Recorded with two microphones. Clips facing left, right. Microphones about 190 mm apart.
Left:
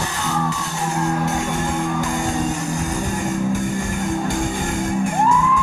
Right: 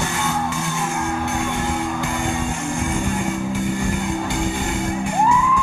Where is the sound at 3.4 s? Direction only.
45° left (ahead or behind).